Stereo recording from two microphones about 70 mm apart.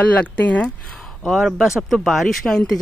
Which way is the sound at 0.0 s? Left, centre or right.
Left.